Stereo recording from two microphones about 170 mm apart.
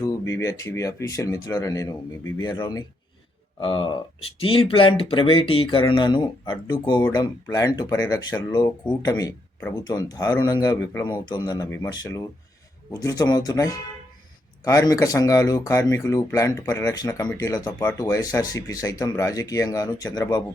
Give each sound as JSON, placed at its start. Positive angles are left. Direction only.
{"t": 0.0, "sound": "speech", "side_deg": 15}